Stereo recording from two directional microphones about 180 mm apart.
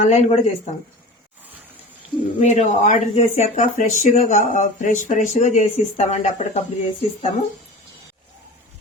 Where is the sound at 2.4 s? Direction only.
40° left (ahead or behind).